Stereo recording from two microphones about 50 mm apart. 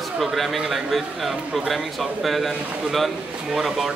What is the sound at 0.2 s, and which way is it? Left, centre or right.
A man's voice, centre.